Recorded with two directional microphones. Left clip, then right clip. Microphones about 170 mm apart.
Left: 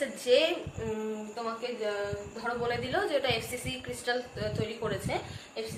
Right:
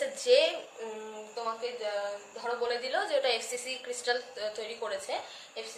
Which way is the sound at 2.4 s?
25° right (ahead or behind).